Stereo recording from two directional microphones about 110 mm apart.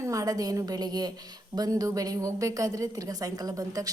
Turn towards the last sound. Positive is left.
turn(degrees=-35)  # may be behind; listen again after turning